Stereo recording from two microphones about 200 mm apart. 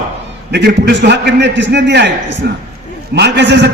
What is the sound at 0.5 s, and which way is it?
A man's voice, 55° right (ahead or behind).